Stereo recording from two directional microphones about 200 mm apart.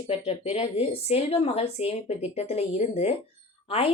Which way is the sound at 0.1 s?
30° left (ahead or behind).